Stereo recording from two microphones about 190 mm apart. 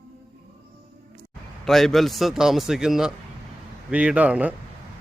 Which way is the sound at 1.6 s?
Centre (ahead or behind).